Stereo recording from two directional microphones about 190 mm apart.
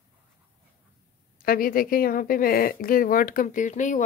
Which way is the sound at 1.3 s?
50° left (ahead or behind).